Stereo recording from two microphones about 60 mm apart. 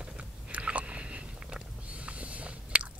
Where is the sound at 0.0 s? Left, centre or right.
Right.